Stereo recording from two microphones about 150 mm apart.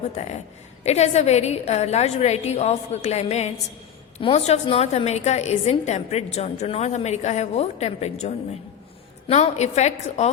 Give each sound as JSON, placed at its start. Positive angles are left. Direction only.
{"t": 0.2, "sound": "a woman's voice", "side_deg": 50}